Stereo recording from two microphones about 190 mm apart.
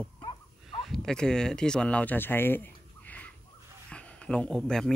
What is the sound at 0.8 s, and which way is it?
Speech, centre (ahead or behind).